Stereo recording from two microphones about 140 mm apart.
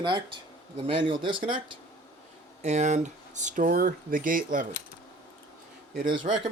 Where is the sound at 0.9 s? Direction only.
35° right (ahead or behind).